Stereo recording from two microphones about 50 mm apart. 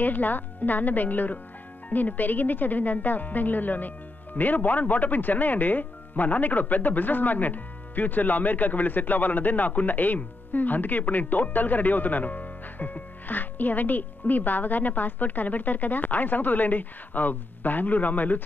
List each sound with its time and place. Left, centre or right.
0.0 s speech: left